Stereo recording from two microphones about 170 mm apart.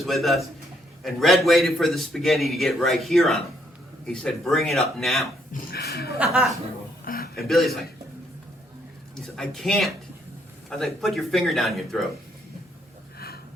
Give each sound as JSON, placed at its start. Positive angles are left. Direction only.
{"t": 0.0, "sound": "a man's voice", "side_deg": 0}
{"t": 5.7, "sound": "speech", "side_deg": 65}
{"t": 6.1, "sound": "a man's voice", "side_deg": 0}
{"t": 7.0, "sound": "a sound", "side_deg": 60}
{"t": 7.4, "sound": "a man's voice", "side_deg": 0}
{"t": 9.1, "sound": "a man's voice", "side_deg": 5}
{"t": 13.1, "sound": "a sound", "side_deg": 65}